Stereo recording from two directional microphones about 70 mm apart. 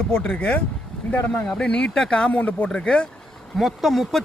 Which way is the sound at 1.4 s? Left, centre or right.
Centre.